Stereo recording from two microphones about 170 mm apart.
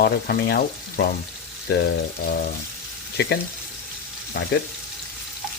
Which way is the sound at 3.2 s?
70° left (ahead or behind).